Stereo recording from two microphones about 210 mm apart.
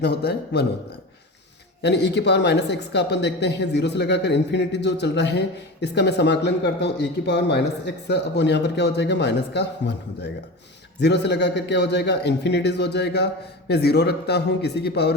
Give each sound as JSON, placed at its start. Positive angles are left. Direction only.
{"t": 0.0, "sound": "a man's voice", "side_deg": 50}
{"t": 1.8, "sound": "a man's voice", "side_deg": 55}